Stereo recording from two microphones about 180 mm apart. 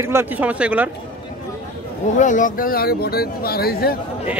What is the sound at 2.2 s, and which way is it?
Speech, 45° left (ahead or behind).